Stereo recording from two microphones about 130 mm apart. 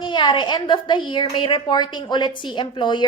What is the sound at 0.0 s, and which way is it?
A woman's voice, 35° left (ahead or behind).